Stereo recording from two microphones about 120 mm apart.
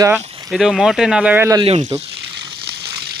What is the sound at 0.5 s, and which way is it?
Speech, 5° right (ahead or behind).